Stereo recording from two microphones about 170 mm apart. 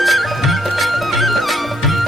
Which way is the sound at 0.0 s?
Centre (ahead or behind).